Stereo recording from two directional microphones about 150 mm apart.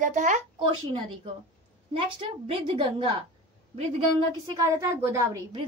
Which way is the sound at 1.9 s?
35° right (ahead or behind).